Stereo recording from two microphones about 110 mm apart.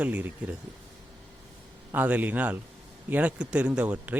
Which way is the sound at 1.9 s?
15° right (ahead or behind).